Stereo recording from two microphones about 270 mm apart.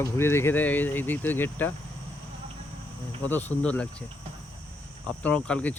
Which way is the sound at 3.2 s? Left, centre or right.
Centre.